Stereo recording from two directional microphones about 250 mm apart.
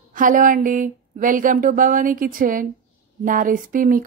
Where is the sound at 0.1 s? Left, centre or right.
Right.